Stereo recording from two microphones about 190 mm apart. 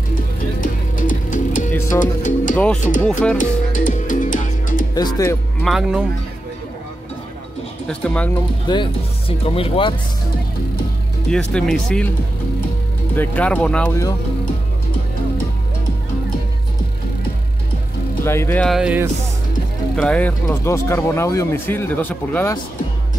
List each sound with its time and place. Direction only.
0.6 s music: 45° left (ahead or behind)
2.0 s speech: 40° left (ahead or behind)
2.5 s speech: 5° left (ahead or behind)
3.3 s music: 45° left (ahead or behind)
4.9 s speech: 20° left (ahead or behind)
5.6 s speech: centre (ahead or behind)
7.9 s speech: 5° left (ahead or behind)
8.7 s speech: 25° left (ahead or behind)
11.2 s speech: 5° left (ahead or behind)
13.1 s speech: 10° left (ahead or behind)
18.2 s speech: 15° left (ahead or behind); by 19.0 s 5° right (ahead or behind)
20.0 s speech: 5° left (ahead or behind)